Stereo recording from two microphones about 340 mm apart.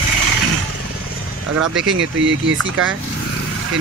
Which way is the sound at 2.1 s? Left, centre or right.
Right.